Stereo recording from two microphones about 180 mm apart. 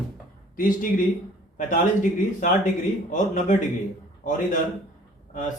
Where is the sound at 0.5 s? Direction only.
50° left (ahead or behind).